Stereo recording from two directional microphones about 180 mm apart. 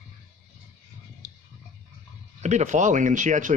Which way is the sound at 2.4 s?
40° right (ahead or behind).